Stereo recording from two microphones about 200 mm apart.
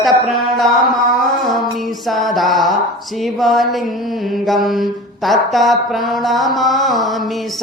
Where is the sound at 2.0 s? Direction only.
Centre (ahead or behind).